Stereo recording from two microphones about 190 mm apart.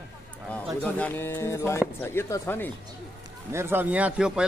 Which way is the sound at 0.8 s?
10° left (ahead or behind).